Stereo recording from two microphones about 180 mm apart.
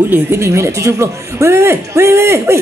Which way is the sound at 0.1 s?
15° right (ahead or behind).